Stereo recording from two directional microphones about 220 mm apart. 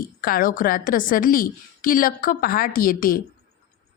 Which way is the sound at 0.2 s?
40° left (ahead or behind).